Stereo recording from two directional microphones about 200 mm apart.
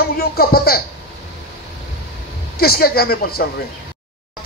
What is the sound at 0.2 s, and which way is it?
Speech, 50° left (ahead or behind).